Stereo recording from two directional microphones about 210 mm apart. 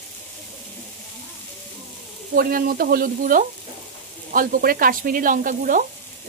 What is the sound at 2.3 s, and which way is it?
Speech, 45° right (ahead or behind).